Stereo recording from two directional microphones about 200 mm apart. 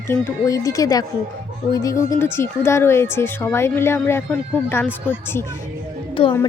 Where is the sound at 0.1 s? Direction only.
15° left (ahead or behind).